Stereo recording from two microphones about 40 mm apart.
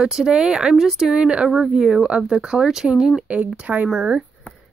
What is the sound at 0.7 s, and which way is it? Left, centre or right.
Speech, centre.